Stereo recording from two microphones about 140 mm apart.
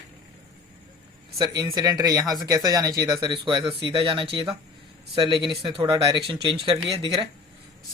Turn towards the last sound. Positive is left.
turn(degrees=-35)  # may be behind; listen again after turning